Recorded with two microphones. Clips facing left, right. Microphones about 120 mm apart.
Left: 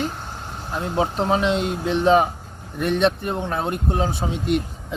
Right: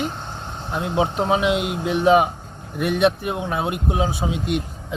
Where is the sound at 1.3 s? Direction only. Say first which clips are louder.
Right 1 dB; 10° right (ahead or behind).